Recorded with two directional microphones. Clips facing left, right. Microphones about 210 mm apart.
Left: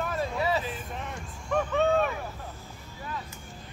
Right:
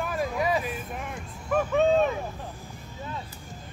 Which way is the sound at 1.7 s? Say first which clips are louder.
Right 4 dB; 20° right (ahead or behind).